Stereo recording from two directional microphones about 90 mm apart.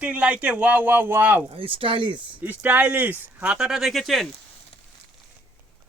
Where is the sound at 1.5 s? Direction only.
90° right.